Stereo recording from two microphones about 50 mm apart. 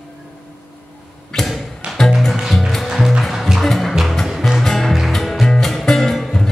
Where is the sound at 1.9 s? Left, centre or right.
Centre.